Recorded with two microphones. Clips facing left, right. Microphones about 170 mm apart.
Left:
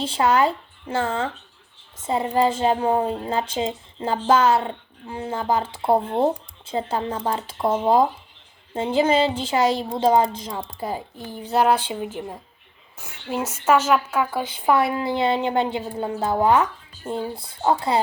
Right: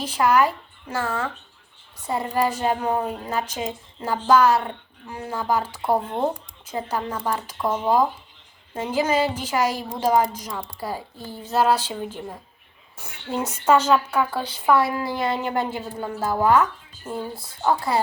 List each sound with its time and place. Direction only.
0.0 s a woman's voice: 25° left (ahead or behind); by 14.4 s 10° left (ahead or behind)
14.5 s a woman's voice: 20° left (ahead or behind)